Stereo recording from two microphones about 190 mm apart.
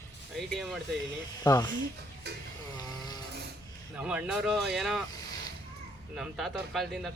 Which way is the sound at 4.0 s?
5° right (ahead or behind).